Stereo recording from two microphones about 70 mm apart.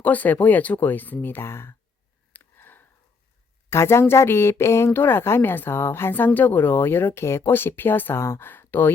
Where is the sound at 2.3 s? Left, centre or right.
Left.